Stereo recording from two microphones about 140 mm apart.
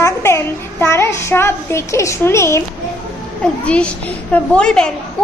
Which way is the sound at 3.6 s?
10° left (ahead or behind).